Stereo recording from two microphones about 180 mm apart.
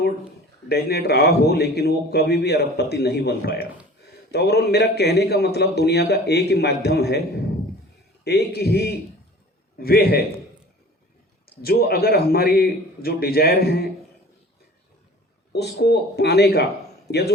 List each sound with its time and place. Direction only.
0.7 s a man's voice: 60° left (ahead or behind)
8.2 s a man's voice: 60° left (ahead or behind)
11.6 s a man's voice: 60° left (ahead or behind)
15.5 s a man's voice: 65° left (ahead or behind)